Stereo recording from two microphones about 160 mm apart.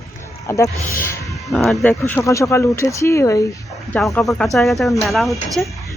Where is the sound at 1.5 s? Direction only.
Centre (ahead or behind); by 3.4 s 20° left (ahead or behind).